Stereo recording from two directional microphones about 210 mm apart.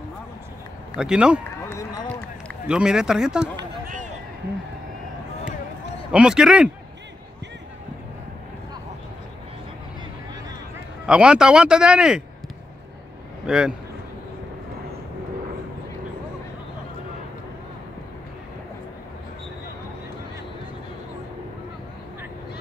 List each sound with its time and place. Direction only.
0.9 s speech: 5° right (ahead or behind)
1.7 s run: 15° left (ahead or behind)
2.6 s speech: 5° right (ahead or behind)
3.8 s a sound: 40° right (ahead or behind)
6.1 s speech: 5° right (ahead or behind)
11.1 s speech: 5° right (ahead or behind)
13.5 s speech: 5° right (ahead or behind)